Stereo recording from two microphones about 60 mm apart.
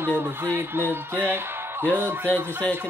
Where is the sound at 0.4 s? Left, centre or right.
Right.